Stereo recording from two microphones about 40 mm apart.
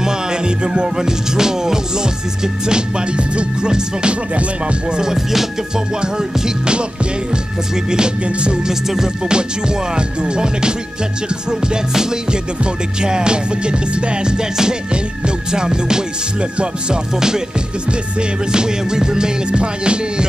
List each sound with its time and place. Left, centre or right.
0.0 s music: centre
5.0 s music: centre
7.7 s music: centre
11.7 s music: centre
18.5 s music: centre